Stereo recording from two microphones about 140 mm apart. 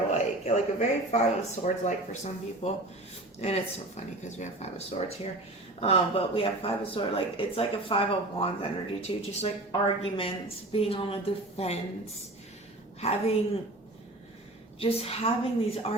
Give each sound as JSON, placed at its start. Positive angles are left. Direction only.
{"t": 0.1, "sound": "speech", "side_deg": 55}
{"t": 13.0, "sound": "speech", "side_deg": 45}
{"t": 14.8, "sound": "speech", "side_deg": 45}